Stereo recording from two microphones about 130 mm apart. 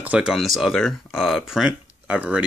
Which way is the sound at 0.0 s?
10° right (ahead or behind).